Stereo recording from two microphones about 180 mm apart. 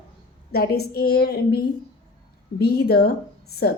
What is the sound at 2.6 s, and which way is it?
Speech, 60° left (ahead or behind).